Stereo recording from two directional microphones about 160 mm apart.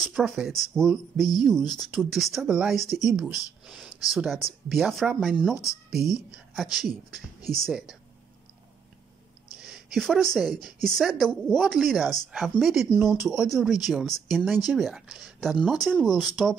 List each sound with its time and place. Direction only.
0.1 s a woman's voice: centre (ahead or behind)
9.9 s a woman's voice: centre (ahead or behind)